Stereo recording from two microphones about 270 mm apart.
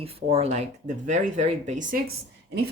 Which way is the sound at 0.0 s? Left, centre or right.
Right.